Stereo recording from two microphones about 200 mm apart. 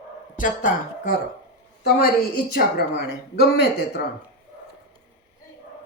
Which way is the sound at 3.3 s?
55° left (ahead or behind).